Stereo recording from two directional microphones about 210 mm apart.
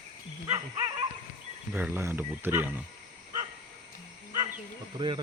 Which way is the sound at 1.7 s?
10° right (ahead or behind).